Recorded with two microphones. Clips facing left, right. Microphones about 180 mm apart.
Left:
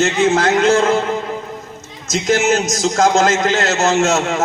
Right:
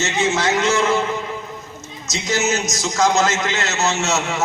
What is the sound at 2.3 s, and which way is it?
A man's voice, 55° left (ahead or behind).